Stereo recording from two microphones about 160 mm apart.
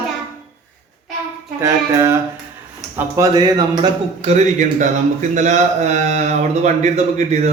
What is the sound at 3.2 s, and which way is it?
Speech, 25° right (ahead or behind).